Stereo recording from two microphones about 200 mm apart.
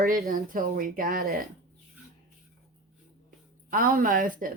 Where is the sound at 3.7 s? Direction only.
45° right (ahead or behind).